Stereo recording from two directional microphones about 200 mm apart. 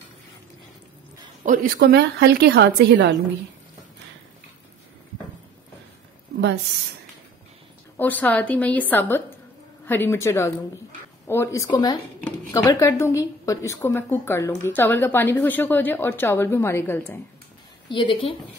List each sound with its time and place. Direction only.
1.4 s a woman's voice: 45° right (ahead or behind); by 3.2 s 60° right (ahead or behind)
8.0 s speech: 10° left (ahead or behind)
12.2 s speech: 5° left (ahead or behind)
17.8 s a woman's voice: 25° left (ahead or behind)